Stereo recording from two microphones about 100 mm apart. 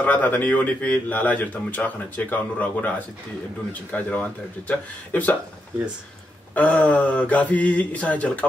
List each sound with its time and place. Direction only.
0.0 s a man's voice: 15° left (ahead or behind)
3.9 s a man's voice: 15° left (ahead or behind)
6.5 s a man's voice: 15° left (ahead or behind)